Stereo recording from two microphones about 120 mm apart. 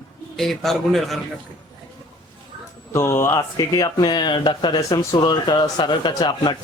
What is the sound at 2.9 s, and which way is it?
Speech, 20° left (ahead or behind).